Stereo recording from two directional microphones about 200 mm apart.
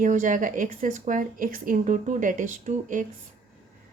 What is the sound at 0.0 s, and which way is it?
A woman's voice, 40° right (ahead or behind).